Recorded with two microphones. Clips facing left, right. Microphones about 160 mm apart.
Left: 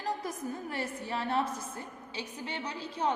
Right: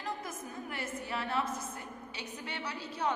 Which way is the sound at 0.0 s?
35° left (ahead or behind).